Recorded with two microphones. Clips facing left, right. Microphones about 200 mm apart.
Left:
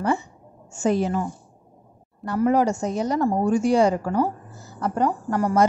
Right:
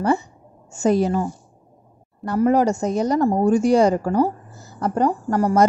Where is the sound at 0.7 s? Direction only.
40° right (ahead or behind).